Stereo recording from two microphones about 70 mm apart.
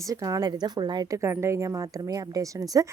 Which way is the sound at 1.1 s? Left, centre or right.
Right.